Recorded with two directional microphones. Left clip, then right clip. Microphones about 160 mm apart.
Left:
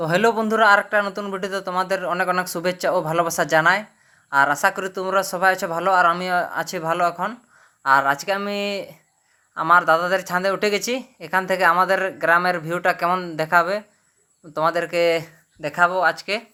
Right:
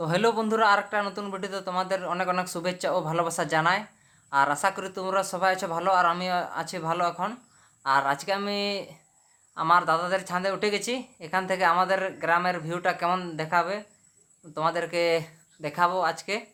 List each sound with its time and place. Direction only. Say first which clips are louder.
0.0 s speech: left 6 dB; 30° left (ahead or behind)